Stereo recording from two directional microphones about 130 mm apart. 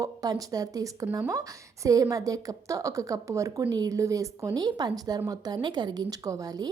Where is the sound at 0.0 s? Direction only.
25° right (ahead or behind).